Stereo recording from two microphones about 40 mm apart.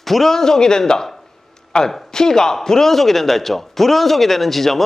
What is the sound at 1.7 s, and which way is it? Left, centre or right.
Speech, left.